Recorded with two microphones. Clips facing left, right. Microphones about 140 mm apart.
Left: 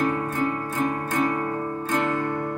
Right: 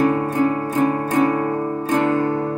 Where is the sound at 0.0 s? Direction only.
40° right (ahead or behind).